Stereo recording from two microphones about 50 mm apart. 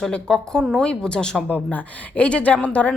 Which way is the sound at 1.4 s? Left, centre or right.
Left.